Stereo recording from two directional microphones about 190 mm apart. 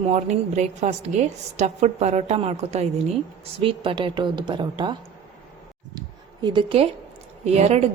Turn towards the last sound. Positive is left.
turn(degrees=-35)  # may be behind; listen again after turning